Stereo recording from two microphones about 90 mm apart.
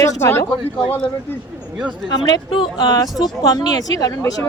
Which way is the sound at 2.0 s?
50° left (ahead or behind).